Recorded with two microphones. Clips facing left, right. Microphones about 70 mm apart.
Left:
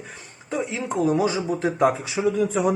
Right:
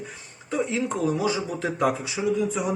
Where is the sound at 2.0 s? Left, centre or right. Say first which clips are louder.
Left 3 dB; left.